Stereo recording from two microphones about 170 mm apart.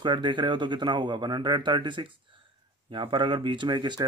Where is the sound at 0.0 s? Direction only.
25° right (ahead or behind).